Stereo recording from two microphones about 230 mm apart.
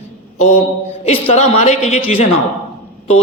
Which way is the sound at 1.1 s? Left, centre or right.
Left.